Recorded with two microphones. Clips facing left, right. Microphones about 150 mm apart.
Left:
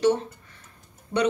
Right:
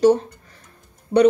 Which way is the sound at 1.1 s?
25° right (ahead or behind).